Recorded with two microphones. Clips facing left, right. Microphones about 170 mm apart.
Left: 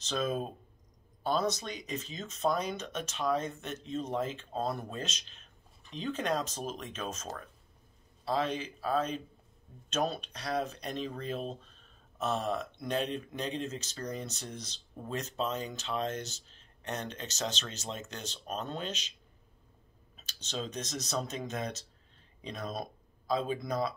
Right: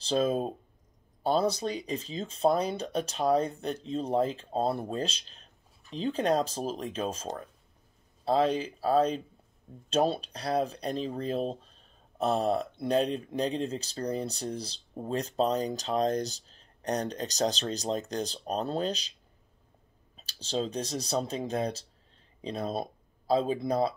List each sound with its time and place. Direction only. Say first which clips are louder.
0.0 s speech: right 6 dB; 30° right (ahead or behind)
8.3 s speech: right 6 dB; 35° right (ahead or behind)
20.2 s speech: right 7 dB; 30° right (ahead or behind)